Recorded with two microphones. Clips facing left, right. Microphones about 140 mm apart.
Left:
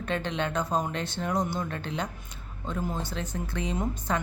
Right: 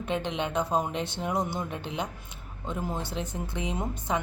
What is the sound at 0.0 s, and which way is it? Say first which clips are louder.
Speech: even; 15° right (ahead or behind).